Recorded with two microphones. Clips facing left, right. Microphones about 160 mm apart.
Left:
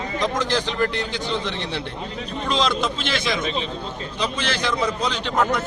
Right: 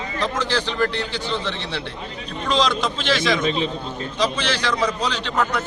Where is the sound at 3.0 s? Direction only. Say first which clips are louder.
Right 4 dB; 10° left (ahead or behind).